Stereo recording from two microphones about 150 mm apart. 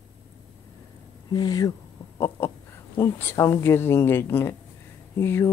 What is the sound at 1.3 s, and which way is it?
Speech, 25° left (ahead or behind).